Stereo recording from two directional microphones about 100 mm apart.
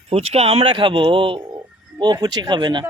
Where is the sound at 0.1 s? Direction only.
85° right; by 1.4 s 60° right (ahead or behind).